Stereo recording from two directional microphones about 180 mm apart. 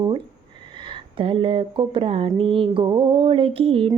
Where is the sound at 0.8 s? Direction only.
30° right (ahead or behind).